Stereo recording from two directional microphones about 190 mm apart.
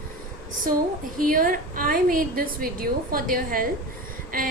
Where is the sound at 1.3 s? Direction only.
45° right (ahead or behind).